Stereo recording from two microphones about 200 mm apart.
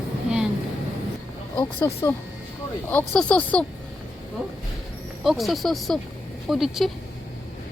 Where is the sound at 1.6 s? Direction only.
10° left (ahead or behind).